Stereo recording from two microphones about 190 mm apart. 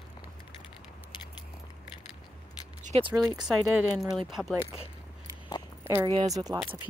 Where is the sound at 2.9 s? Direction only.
30° right (ahead or behind).